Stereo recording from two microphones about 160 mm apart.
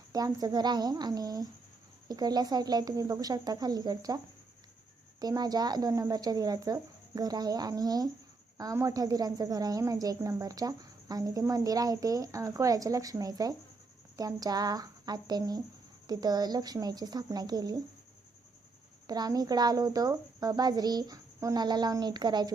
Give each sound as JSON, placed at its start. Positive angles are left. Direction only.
{"t": 0.1, "sound": "a woman's voice", "side_deg": -25}
{"t": 5.2, "sound": "a woman's voice", "side_deg": -25}
{"t": 19.0, "sound": "a woman's voice", "side_deg": -25}